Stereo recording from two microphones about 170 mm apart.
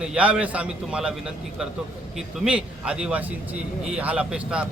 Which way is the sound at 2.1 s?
5° right (ahead or behind).